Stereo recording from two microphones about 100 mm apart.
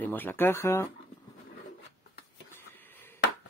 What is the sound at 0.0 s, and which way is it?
Speech, 20° left (ahead or behind).